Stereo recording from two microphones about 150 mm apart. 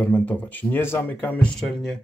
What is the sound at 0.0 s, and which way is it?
Speech, 10° left (ahead or behind).